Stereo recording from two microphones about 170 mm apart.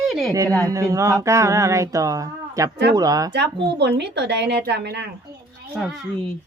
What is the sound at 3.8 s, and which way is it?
A woman's voice, 80° right.